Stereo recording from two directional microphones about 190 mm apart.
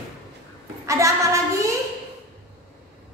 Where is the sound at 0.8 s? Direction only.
15° right (ahead or behind).